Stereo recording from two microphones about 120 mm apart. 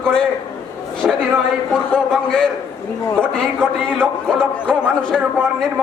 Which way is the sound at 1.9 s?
5° left (ahead or behind).